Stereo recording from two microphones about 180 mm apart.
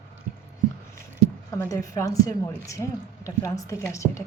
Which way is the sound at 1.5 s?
20° left (ahead or behind).